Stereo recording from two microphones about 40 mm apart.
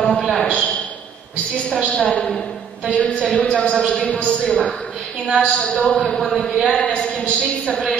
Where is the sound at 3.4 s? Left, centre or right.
Centre.